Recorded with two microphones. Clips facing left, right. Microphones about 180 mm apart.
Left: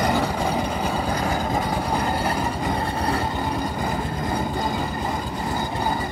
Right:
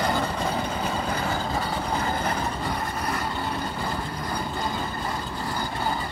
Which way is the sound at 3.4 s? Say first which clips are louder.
Left 4 dB; 20° left (ahead or behind).